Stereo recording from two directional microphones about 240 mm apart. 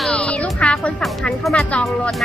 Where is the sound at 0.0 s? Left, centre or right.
Centre.